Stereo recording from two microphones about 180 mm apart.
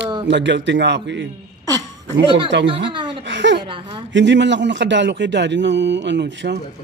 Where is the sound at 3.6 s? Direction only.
30° right (ahead or behind).